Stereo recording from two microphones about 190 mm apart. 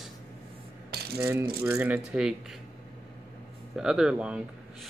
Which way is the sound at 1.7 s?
5° right (ahead or behind).